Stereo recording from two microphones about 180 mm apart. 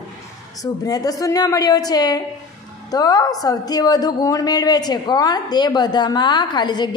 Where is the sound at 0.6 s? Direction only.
20° left (ahead or behind).